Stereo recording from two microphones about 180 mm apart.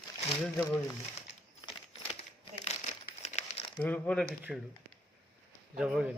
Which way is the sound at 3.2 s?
35° left (ahead or behind).